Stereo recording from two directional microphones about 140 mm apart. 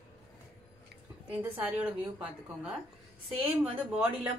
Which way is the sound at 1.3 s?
10° right (ahead or behind).